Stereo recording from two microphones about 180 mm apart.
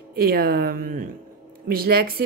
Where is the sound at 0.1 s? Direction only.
60° right (ahead or behind).